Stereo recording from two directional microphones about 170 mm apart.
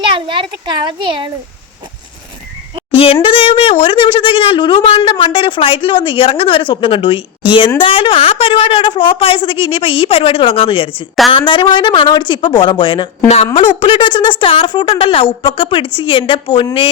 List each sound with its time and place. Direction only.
0.0 s a child's voice: 30° right (ahead or behind)
2.9 s speech: 35° left (ahead or behind)